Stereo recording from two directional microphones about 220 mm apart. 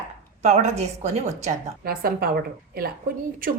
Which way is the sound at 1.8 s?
40° right (ahead or behind).